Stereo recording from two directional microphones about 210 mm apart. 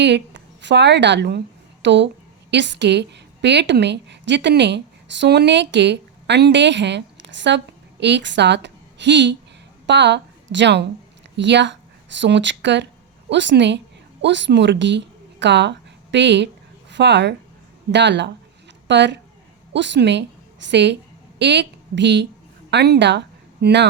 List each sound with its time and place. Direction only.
0.0 s a woman's voice: 55° right (ahead or behind)